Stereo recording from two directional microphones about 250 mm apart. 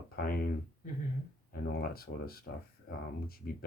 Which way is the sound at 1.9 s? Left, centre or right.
Left.